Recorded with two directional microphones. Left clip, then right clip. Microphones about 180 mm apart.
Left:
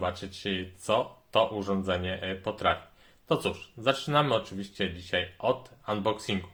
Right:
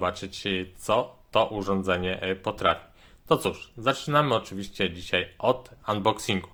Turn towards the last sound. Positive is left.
turn(degrees=-30)  # may be behind; listen again after turning